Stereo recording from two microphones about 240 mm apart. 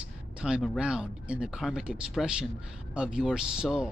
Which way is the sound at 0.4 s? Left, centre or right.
Centre.